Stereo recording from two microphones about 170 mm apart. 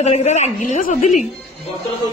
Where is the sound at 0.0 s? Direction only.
40° left (ahead or behind).